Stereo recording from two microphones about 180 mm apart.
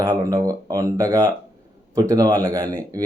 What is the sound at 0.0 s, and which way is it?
Speech, 15° right (ahead or behind).